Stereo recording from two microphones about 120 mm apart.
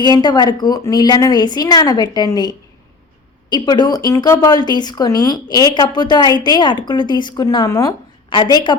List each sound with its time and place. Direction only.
0.0 s a woman's voice: 35° left (ahead or behind)
3.5 s a woman's voice: 35° left (ahead or behind)